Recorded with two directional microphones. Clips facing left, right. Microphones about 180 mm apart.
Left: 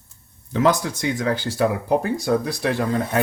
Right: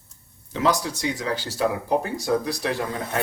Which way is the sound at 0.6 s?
55° left (ahead or behind).